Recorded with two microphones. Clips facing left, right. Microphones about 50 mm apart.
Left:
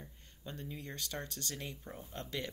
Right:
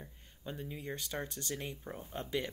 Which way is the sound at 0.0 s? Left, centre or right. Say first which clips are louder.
Right 3 dB; centre.